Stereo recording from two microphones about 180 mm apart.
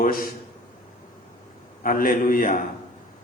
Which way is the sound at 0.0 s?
55° left (ahead or behind).